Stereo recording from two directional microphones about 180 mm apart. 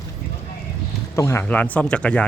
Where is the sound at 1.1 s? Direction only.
15° left (ahead or behind).